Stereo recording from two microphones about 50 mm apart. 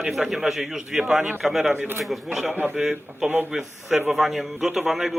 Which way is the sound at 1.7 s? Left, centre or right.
Right.